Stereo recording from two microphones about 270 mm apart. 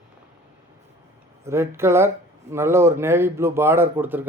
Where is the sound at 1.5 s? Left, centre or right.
Centre.